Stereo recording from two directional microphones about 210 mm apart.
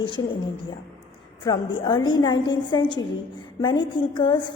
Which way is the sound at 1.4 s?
25° left (ahead or behind).